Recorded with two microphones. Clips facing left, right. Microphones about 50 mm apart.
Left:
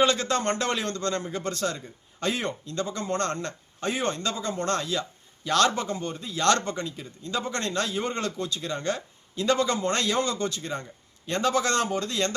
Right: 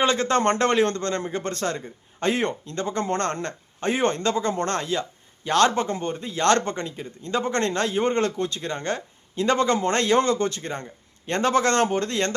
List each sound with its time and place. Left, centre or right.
0.0 s a man's voice: right